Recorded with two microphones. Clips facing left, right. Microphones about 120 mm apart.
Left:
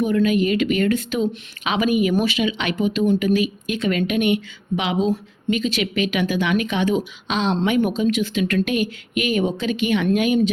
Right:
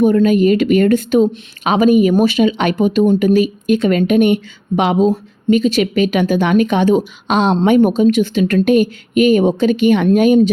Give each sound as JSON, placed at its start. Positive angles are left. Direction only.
{"t": 0.0, "sound": "speech", "side_deg": -40}